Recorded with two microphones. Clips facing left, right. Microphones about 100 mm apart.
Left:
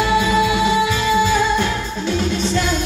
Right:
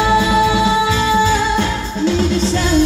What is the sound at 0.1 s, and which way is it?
Music, 30° right (ahead or behind).